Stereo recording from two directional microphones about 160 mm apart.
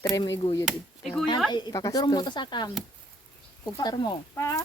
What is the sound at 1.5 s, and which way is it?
Speech, 25° left (ahead or behind).